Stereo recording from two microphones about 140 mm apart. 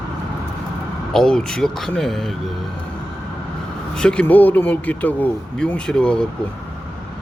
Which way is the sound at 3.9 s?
5° left (ahead or behind).